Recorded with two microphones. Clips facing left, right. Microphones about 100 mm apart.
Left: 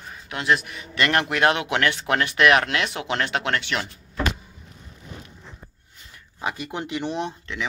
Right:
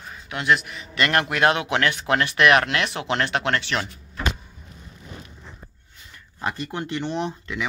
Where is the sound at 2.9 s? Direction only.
25° right (ahead or behind).